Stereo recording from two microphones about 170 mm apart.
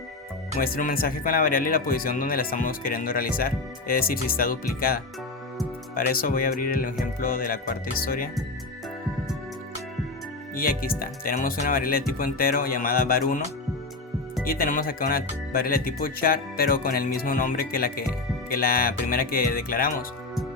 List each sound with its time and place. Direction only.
0.6 s speech: 60° left (ahead or behind)
10.5 s speech: 60° left (ahead or behind)
14.4 s speech: 60° left (ahead or behind)